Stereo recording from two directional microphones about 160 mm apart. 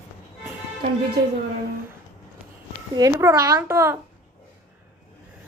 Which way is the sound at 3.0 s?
20° right (ahead or behind).